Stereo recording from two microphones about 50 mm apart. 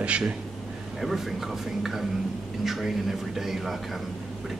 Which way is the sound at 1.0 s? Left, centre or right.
Centre.